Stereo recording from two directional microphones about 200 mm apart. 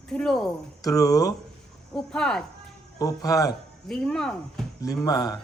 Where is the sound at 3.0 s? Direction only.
20° left (ahead or behind).